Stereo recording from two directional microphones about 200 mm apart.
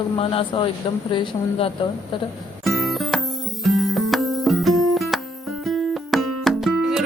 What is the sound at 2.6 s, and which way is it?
Music, centre (ahead or behind).